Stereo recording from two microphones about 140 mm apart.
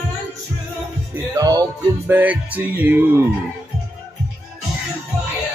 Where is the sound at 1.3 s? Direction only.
25° right (ahead or behind).